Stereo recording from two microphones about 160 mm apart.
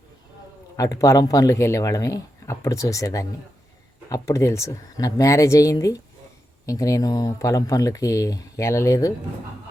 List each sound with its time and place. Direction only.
0.8 s speech: 20° left (ahead or behind)